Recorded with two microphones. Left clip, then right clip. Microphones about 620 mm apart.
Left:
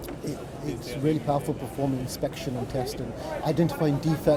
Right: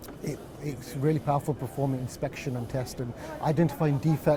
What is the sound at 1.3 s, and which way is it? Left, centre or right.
Speech, right.